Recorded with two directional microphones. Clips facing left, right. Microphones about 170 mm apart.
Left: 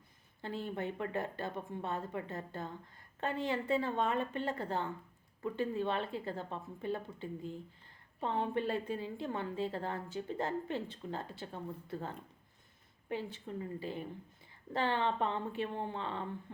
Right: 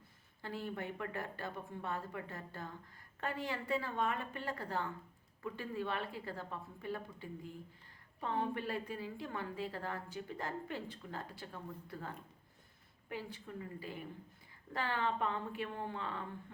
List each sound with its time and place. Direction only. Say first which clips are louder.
0.4 s a woman's voice: left 3 dB; 25° left (ahead or behind)